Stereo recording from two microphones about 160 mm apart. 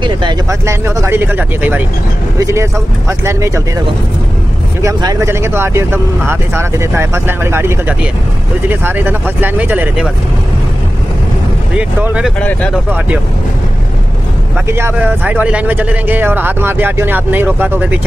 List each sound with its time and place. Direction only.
0.0 s a sound: 30° right (ahead or behind)
0.5 s speech: 15° right (ahead or behind)
4.8 s speech: 20° right (ahead or behind)
12.0 s speech: 10° right (ahead or behind)
14.7 s speech: 15° right (ahead or behind)